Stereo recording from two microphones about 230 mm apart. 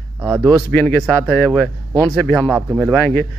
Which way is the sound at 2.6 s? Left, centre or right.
Centre.